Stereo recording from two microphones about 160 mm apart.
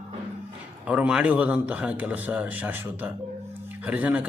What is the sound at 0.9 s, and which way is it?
A man's voice, 5° right (ahead or behind).